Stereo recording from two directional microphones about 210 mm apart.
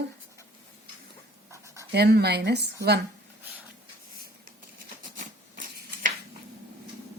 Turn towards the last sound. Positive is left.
turn(degrees=-40)  # may be behind; listen again after turning